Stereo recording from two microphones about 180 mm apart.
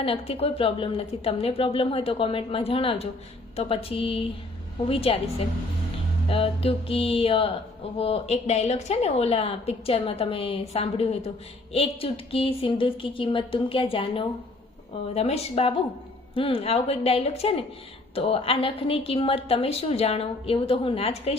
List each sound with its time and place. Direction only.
0.0 s a woman's voice: 35° left (ahead or behind)